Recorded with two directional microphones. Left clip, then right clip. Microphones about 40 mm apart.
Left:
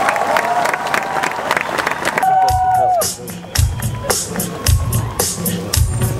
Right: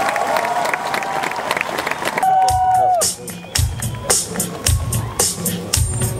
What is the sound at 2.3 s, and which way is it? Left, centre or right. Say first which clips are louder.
Run: even; right.